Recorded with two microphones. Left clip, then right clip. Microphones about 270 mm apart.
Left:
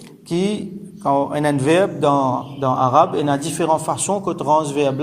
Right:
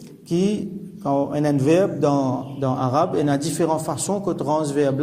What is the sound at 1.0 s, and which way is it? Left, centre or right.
Speech, left.